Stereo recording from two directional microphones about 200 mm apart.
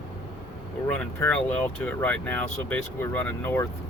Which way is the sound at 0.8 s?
5° left (ahead or behind).